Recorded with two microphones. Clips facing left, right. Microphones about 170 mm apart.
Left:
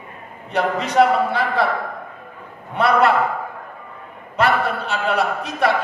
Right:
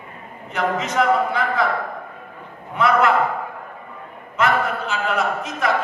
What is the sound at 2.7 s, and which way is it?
Speech, 35° left (ahead or behind).